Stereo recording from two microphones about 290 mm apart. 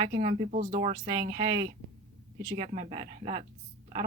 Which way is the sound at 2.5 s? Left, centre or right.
Centre.